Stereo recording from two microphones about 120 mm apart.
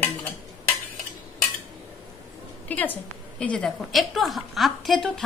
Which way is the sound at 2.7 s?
15° left (ahead or behind).